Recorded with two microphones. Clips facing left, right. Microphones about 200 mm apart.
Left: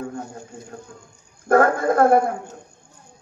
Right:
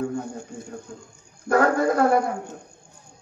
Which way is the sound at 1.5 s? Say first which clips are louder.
Left 2 dB; 50° left (ahead or behind).